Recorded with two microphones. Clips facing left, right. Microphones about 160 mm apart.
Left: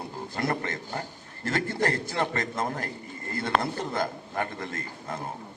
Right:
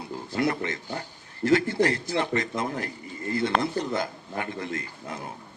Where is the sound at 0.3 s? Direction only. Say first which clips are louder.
Right 3 dB; 45° left (ahead or behind).